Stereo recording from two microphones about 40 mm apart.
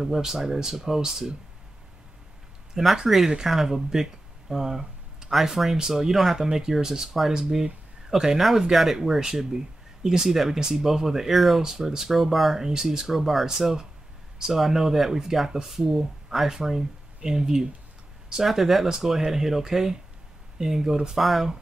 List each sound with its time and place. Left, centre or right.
0.0 s speech: centre
2.7 s speech: centre
8.4 s speech: centre
8.9 s speech: centre